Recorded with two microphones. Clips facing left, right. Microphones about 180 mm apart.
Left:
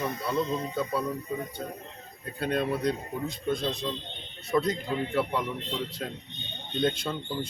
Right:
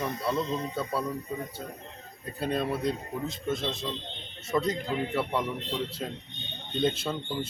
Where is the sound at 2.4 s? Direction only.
Centre (ahead or behind).